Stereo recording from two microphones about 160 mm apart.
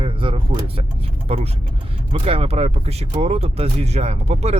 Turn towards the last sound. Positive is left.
turn(degrees=-45)  # may be behind; listen again after turning